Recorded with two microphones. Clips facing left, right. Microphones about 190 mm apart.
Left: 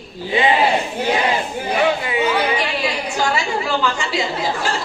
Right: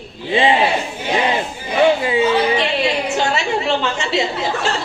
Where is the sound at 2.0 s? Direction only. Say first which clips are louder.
Right 3 dB; 25° right (ahead or behind).